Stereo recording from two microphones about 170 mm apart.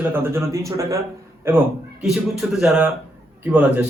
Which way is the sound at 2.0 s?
Centre (ahead or behind).